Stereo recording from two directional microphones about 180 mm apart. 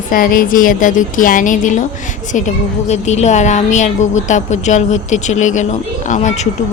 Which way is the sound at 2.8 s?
40° left (ahead or behind).